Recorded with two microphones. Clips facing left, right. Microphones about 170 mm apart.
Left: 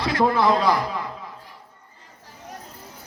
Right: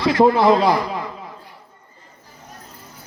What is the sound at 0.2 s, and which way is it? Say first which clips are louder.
Speech: right 6 dB; 45° right (ahead or behind).